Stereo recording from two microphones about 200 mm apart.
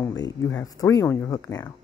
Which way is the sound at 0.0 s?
15° left (ahead or behind).